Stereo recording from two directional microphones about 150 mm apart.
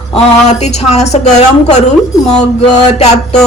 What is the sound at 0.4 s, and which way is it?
Speech, 50° left (ahead or behind).